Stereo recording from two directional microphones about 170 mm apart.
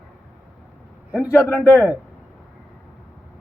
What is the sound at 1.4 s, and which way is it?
Speech, 10° left (ahead or behind).